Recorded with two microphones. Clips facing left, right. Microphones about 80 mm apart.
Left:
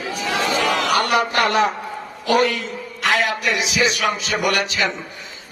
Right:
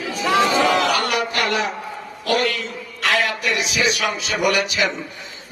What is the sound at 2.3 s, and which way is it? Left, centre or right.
Speech, centre.